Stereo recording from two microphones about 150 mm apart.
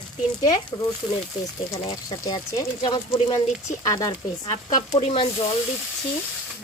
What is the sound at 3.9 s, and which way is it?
Speech, 25° left (ahead or behind).